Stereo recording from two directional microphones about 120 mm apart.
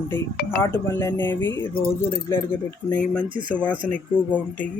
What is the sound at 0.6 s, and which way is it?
Speech, 20° left (ahead or behind).